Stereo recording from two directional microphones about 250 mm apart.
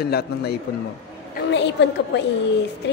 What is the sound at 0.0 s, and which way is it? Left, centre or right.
A man's voice, left.